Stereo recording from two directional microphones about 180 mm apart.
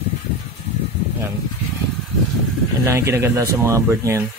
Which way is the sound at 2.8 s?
15° right (ahead or behind).